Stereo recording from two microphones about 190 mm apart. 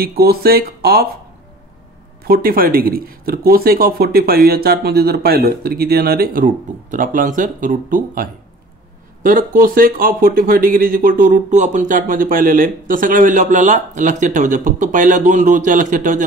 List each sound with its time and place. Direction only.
0.2 s speech: 55° right (ahead or behind)
2.2 s speech: 50° right (ahead or behind)